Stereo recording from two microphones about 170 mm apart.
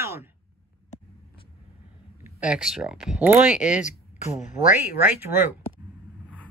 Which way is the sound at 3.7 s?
45° left (ahead or behind).